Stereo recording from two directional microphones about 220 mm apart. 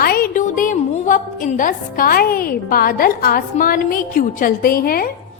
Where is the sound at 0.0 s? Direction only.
40° left (ahead or behind).